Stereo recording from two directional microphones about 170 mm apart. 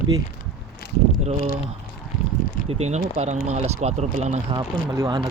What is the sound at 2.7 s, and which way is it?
Speech, 40° right (ahead or behind).